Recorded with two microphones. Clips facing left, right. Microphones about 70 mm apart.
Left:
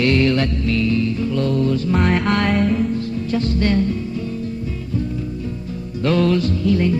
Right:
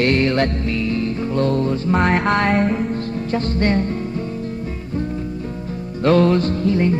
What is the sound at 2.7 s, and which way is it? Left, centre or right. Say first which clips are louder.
Music: left 2 dB; right.